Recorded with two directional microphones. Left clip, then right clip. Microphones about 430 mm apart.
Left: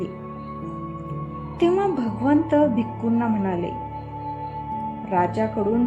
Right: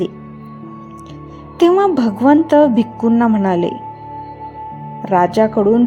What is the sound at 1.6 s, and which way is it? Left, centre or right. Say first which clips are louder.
A woman's voice: right 9 dB; centre.